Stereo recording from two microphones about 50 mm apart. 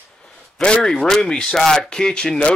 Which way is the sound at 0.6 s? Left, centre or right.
Centre.